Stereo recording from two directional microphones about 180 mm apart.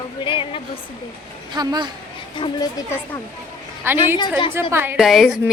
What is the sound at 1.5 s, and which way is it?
Speech, 25° right (ahead or behind).